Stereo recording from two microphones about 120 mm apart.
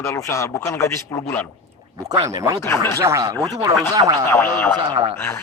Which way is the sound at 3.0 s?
30° right (ahead or behind).